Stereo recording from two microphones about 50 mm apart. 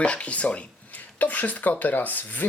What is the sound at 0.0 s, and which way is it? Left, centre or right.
Speech, left.